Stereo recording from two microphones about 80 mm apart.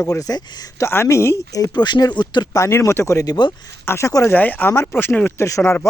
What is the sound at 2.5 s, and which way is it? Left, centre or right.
Speech, left.